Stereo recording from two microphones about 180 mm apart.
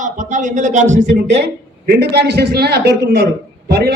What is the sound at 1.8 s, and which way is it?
A man's voice, 60° right (ahead or behind).